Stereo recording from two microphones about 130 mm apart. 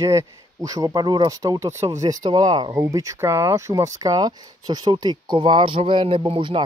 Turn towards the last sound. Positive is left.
turn(degrees=-45)  # may be behind; listen again after turning